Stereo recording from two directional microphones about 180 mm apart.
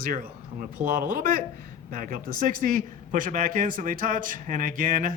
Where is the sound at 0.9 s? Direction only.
50° right (ahead or behind).